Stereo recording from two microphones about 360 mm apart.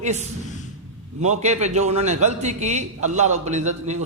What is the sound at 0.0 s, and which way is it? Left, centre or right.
A man's voice, centre.